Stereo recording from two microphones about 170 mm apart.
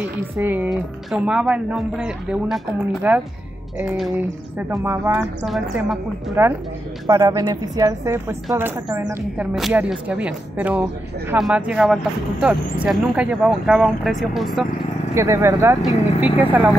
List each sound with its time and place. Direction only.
0.4 s speech: 10° right (ahead or behind)
5.4 s speech: centre (ahead or behind)
6.4 s a woman's voice: 15° right (ahead or behind)
9.4 s speech: 5° right (ahead or behind)
15.1 s speech: 15° right (ahead or behind)